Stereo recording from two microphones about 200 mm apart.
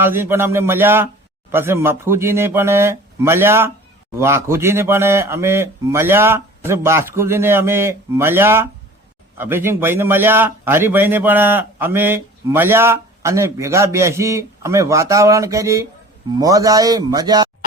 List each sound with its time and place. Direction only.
0.0 s a man's voice: 10° right (ahead or behind)